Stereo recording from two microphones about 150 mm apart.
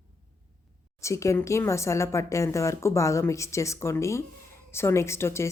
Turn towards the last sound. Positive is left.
turn(degrees=15)  # may be behind; listen again after turning